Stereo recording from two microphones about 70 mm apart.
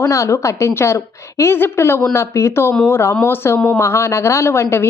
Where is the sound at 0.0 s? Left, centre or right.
Left.